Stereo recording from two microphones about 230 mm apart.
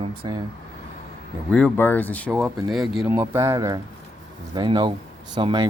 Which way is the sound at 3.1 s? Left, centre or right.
Centre.